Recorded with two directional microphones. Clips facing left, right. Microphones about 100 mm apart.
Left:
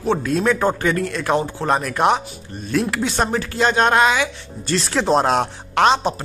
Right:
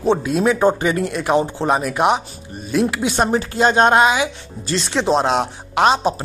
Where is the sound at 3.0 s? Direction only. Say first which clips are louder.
Right 3 dB; 15° right (ahead or behind).